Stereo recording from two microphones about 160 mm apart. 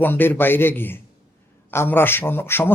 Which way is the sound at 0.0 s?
15° left (ahead or behind).